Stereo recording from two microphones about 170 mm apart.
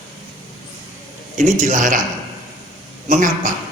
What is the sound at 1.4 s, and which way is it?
Speech, 45° right (ahead or behind).